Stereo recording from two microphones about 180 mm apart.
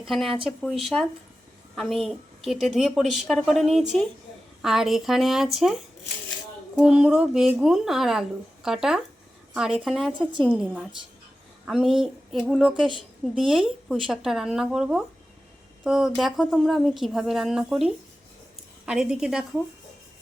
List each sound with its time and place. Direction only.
0.0 s a woman's voice: centre (ahead or behind)
6.7 s a woman's voice: 5° right (ahead or behind)